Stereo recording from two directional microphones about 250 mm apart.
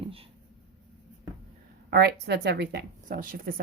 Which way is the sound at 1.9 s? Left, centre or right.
Right.